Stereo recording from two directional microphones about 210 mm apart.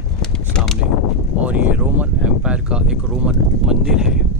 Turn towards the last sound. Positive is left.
turn(degrees=-5)  # may be behind; listen again after turning